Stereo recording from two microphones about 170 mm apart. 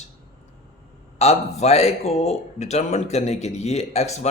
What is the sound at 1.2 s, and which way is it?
Speech, 40° left (ahead or behind).